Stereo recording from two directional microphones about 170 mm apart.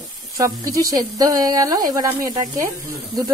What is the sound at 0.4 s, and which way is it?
Speech, 20° right (ahead or behind).